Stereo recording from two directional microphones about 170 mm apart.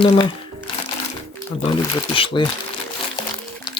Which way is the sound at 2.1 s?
30° left (ahead or behind).